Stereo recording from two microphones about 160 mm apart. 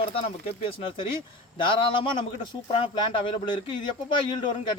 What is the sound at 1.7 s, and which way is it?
Speech, 30° left (ahead or behind).